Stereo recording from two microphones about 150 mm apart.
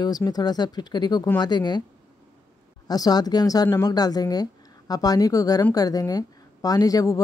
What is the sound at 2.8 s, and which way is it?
Speech, 25° left (ahead or behind).